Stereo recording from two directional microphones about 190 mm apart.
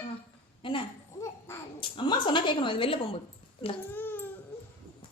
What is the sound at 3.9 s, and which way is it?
Baby cry, 10° left (ahead or behind).